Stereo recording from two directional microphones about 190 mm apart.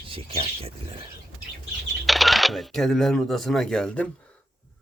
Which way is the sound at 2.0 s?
Centre (ahead or behind).